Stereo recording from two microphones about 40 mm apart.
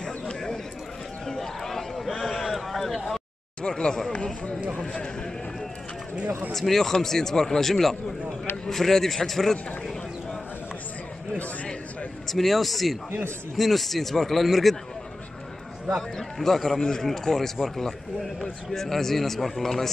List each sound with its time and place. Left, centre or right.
0.0 s a sound: centre
3.6 s a sound: centre
4.1 s speech: left
6.5 s a man's voice: centre
12.3 s a man's voice: centre
16.2 s a man's voice: centre
16.7 s a man's voice: centre